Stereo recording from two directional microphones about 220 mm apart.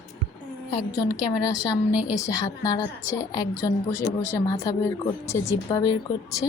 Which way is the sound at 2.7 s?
15° left (ahead or behind).